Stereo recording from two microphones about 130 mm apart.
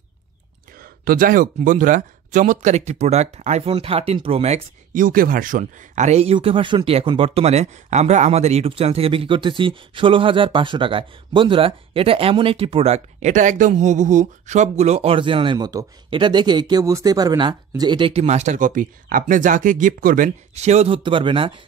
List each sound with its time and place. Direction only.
1.1 s speech: 90° right; by 4.6 s 50° right (ahead or behind)
4.9 s speech: 90° right; by 6.3 s 60° right (ahead or behind)
6.3 s speech: 40° right (ahead or behind)
18.2 s speech: 60° right (ahead or behind); by 20.2 s 90° right
20.5 s speech: 55° right (ahead or behind)
21.0 s speech: 40° right (ahead or behind)